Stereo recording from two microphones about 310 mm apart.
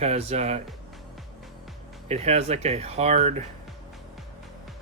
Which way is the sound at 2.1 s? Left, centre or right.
Right.